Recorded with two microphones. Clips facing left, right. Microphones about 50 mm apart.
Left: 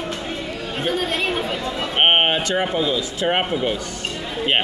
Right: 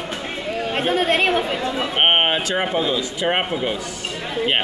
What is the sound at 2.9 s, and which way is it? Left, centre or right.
Speech, centre.